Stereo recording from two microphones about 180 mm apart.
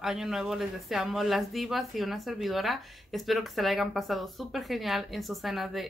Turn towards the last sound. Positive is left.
turn(degrees=0)  # may be behind; listen again after turning